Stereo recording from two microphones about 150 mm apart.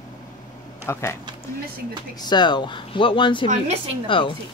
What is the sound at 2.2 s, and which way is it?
A woman's voice, 30° left (ahead or behind).